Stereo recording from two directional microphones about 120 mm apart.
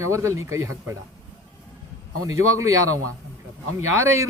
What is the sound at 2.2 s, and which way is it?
Speech, 25° right (ahead or behind).